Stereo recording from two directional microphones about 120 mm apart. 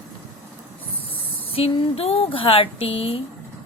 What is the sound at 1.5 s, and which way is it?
A woman's voice, 55° left (ahead or behind).